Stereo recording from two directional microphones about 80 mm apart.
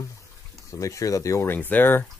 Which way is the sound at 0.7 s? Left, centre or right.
Left.